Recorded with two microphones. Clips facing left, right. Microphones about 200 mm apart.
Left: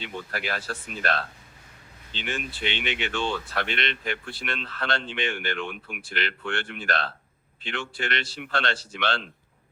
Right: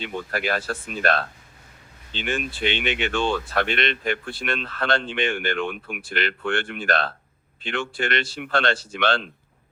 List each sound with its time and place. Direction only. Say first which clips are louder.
0.0 s speech: right 5 dB; 55° right (ahead or behind)